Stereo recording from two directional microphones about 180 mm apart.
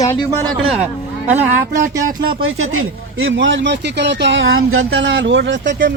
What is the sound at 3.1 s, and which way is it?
Speech, 90° right.